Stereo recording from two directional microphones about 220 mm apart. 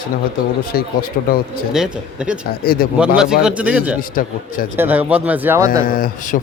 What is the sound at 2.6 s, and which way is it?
Speech, 40° left (ahead or behind).